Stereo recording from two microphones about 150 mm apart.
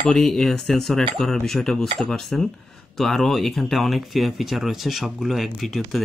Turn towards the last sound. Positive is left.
turn(degrees=0)  # may be behind; listen again after turning